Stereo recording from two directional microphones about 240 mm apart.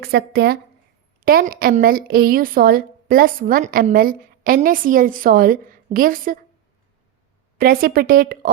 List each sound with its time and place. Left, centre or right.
0.0 s a woman's voice: right
7.6 s a woman's voice: right